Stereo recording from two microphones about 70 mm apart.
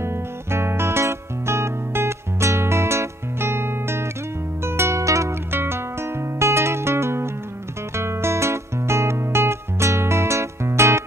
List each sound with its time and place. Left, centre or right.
0.0 s music: right
5.5 s music: right